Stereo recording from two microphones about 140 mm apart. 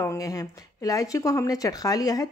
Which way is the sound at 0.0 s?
25° left (ahead or behind).